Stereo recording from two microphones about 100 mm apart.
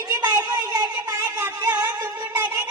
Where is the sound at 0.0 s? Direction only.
40° right (ahead or behind).